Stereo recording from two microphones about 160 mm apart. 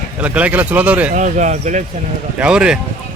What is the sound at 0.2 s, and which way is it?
Speech, 10° right (ahead or behind).